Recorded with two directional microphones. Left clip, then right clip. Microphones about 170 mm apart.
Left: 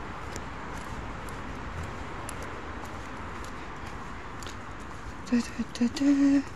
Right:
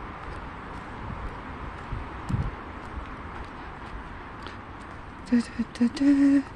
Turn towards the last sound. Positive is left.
turn(degrees=-35)  # may be behind; listen again after turning